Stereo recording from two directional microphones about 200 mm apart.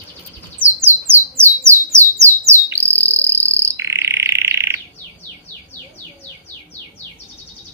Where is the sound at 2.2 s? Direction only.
15° right (ahead or behind).